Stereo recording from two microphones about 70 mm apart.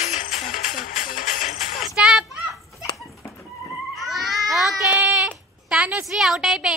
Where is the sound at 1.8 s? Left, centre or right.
Centre.